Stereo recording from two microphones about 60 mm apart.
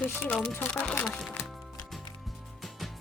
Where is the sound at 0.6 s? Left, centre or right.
Left.